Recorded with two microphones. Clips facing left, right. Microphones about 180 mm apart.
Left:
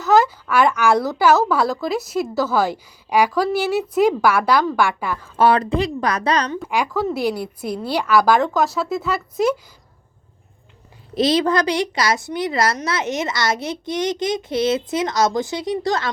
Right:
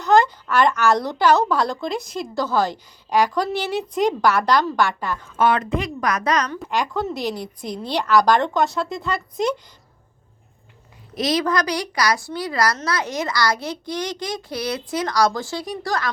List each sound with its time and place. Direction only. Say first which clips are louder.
0.0 s speech: left 1 dB; 5° left (ahead or behind)
5.4 s a woman's voice: left 3 dB; 35° left (ahead or behind)
6.7 s speech: left 2 dB; 5° left (ahead or behind)
11.1 s a child's voice: left 4 dB; 30° left (ahead or behind)